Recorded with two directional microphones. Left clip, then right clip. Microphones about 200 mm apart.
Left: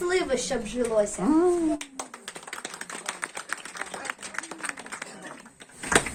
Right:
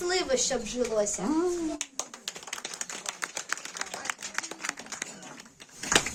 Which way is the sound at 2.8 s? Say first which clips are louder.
Left 3 dB; 60° right (ahead or behind).